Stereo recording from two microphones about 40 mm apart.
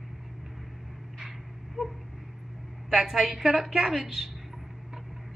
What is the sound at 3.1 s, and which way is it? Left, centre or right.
A woman's voice, centre.